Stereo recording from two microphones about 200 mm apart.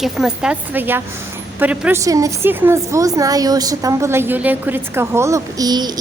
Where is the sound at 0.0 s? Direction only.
5° right (ahead or behind).